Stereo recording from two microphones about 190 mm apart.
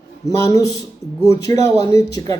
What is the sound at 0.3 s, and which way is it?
Speech, 15° left (ahead or behind).